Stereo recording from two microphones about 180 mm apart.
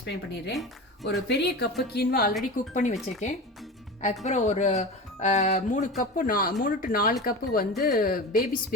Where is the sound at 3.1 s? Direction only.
40° left (ahead or behind).